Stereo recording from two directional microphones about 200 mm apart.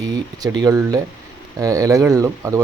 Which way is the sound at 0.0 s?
20° right (ahead or behind).